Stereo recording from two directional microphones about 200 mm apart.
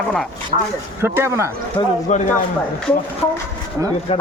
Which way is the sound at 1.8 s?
15° left (ahead or behind).